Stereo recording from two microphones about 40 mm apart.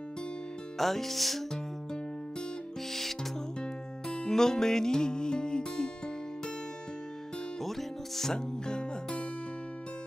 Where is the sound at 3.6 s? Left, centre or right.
Centre.